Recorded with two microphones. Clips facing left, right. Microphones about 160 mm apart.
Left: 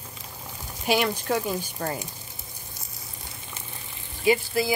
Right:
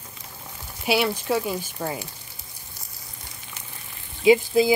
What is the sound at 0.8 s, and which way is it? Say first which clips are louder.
Speech: right 1 dB; 5° right (ahead or behind).